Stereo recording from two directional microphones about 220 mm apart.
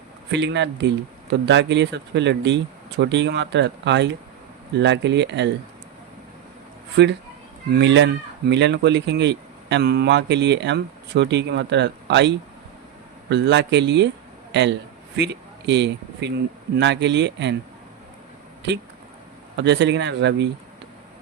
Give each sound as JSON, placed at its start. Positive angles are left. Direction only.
{"t": 0.3, "sound": "speech", "side_deg": -55}
{"t": 6.9, "sound": "speech", "side_deg": -50}
{"t": 13.3, "sound": "a man's voice", "side_deg": -50}
{"t": 19.5, "sound": "speech", "side_deg": -55}